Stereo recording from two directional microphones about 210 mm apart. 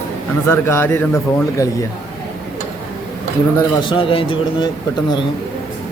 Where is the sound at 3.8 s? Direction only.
25° left (ahead or behind).